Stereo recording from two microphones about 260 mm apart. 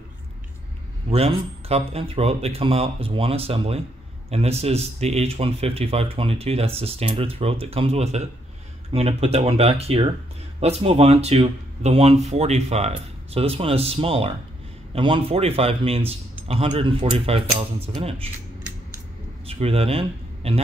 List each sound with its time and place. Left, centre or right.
1.1 s speech: right
19.4 s speech: right